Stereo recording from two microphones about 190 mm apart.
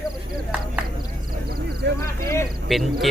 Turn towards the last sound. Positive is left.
turn(degrees=0)  # may be behind; listen again after turning